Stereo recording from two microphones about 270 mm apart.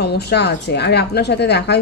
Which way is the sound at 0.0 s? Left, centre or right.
Left.